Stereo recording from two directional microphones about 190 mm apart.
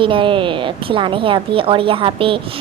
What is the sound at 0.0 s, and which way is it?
Speech, 25° right (ahead or behind).